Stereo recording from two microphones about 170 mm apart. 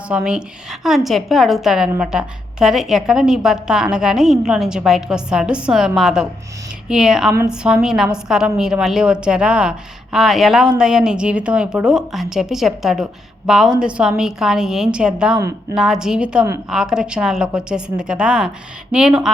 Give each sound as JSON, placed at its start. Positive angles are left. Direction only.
{"t": 0.1, "sound": "a woman's voice", "side_deg": -5}